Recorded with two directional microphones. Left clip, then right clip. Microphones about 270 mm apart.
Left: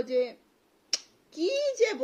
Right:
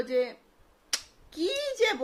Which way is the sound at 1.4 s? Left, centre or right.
Centre.